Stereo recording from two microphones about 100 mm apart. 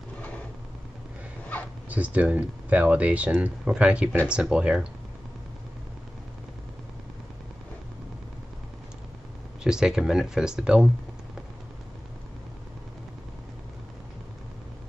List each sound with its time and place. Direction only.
1.5 s a sound: 15° left (ahead or behind)
1.9 s speech: 15° right (ahead or behind)
9.6 s speech: 5° right (ahead or behind)